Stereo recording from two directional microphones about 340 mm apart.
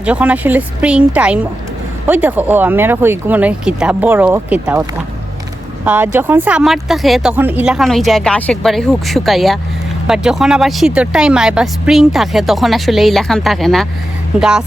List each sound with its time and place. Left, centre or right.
0.0 s speech: centre